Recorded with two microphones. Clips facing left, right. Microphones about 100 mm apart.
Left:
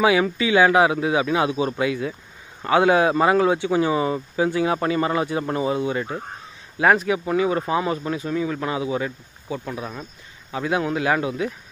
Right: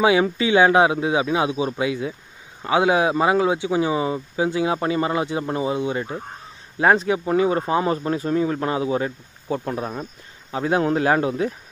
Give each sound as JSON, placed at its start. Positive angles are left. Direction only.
{"t": 0.0, "sound": "speech", "side_deg": -25}